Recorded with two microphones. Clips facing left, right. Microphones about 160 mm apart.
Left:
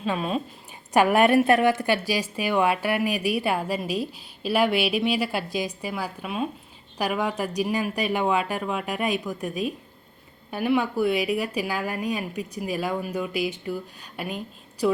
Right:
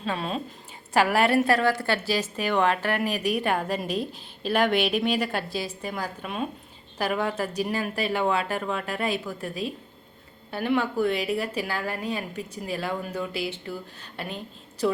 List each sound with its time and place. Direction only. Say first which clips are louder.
0.0 s a woman's voice: left 3 dB; 10° left (ahead or behind)